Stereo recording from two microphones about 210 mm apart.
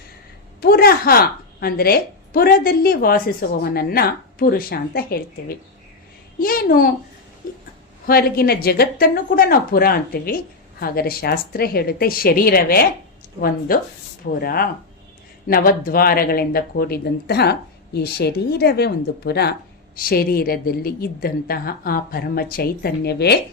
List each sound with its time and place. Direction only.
0.6 s a woman's voice: 45° left (ahead or behind)
8.0 s a woman's voice: 45° left (ahead or behind)